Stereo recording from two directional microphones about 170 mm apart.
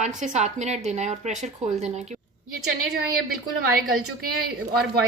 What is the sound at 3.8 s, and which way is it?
Speech, 60° right (ahead or behind).